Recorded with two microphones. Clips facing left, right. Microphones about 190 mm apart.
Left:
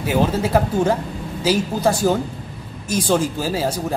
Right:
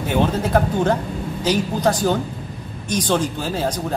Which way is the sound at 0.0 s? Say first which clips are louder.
Left 1 dB; 5° left (ahead or behind).